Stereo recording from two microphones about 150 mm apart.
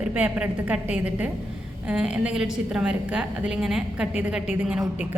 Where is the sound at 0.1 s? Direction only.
10° right (ahead or behind).